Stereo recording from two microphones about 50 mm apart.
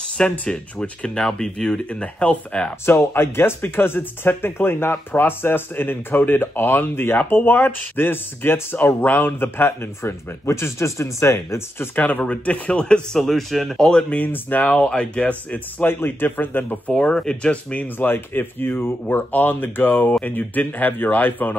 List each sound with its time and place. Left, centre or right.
0.2 s speech: centre
2.8 s speech: left
11.9 s speech: left; by 13.2 s centre
13.2 s speech: centre
14.0 s speech: left
14.9 s speech: left
16.9 s speech: centre
17.9 s speech: left